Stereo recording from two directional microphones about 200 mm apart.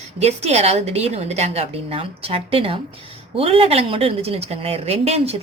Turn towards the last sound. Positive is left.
turn(degrees=-30)  # may be behind; listen again after turning